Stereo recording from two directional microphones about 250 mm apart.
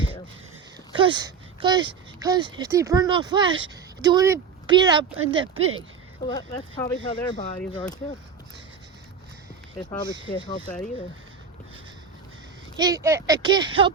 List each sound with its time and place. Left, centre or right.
0.9 s speech: centre
5.1 s speech: right
6.2 s speech: centre
9.7 s speech: centre
12.7 s speech: centre